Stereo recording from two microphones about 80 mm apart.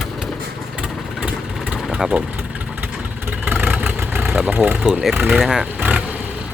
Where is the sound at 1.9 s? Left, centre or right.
Centre.